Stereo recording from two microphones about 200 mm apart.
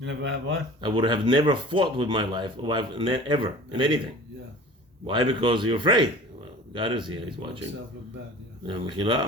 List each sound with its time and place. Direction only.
0.0 s speech: 65° right (ahead or behind)
0.8 s speech: 25° right (ahead or behind)
8.6 s speech: 25° right (ahead or behind)